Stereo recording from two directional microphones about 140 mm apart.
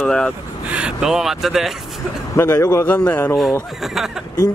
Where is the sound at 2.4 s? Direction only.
20° left (ahead or behind).